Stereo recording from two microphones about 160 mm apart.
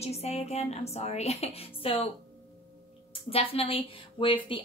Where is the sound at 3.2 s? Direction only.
35° left (ahead or behind).